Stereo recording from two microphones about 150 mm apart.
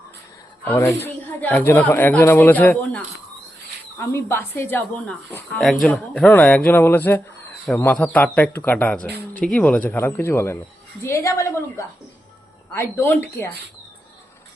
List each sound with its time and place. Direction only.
0.6 s a woman's voice: 15° left (ahead or behind)